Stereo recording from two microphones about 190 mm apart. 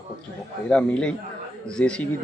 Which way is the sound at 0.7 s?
5° left (ahead or behind).